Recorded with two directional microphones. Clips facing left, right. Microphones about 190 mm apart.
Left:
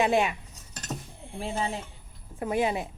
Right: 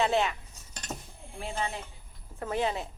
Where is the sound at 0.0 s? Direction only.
15° left (ahead or behind).